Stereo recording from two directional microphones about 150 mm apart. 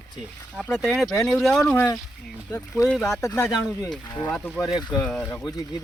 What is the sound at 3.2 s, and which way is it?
Speech, 20° left (ahead or behind).